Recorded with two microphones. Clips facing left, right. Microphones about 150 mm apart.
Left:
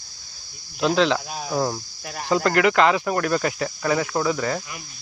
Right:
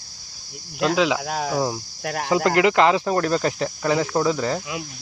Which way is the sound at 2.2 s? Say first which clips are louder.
Right 1 dB; 20° right (ahead or behind).